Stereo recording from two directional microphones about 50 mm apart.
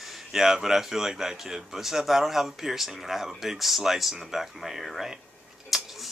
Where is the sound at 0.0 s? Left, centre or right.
Centre.